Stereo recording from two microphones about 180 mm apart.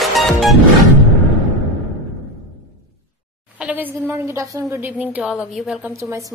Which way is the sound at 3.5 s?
10° right (ahead or behind).